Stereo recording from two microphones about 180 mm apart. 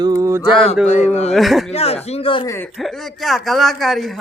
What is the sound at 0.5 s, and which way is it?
Speech, 30° left (ahead or behind).